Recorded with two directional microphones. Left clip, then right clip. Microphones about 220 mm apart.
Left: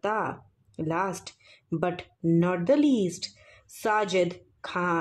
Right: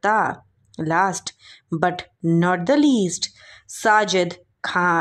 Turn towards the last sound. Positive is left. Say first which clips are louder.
# right 9 dB
turn(degrees=-20)  # may be behind; listen again after turning